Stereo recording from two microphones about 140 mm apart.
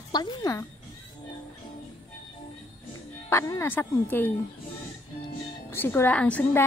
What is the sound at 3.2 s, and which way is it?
Speech, 20° left (ahead or behind).